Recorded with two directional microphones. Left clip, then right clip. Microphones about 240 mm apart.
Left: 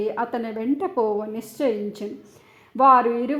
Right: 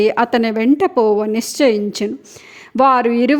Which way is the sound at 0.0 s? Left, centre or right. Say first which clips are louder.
Right 11 dB; right.